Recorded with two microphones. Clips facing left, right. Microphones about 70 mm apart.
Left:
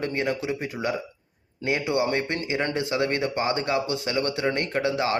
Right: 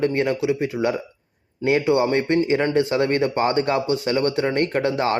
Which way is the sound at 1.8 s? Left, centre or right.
Right.